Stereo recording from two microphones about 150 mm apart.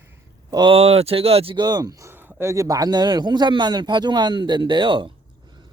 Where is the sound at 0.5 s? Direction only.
35° right (ahead or behind).